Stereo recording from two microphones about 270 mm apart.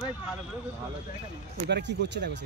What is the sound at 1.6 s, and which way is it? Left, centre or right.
Speech, right.